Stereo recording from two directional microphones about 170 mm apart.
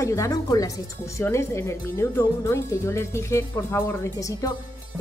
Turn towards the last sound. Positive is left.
turn(degrees=20)  # may be behind; listen again after turning